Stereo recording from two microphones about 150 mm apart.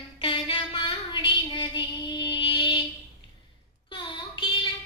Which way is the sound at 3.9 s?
35° left (ahead or behind).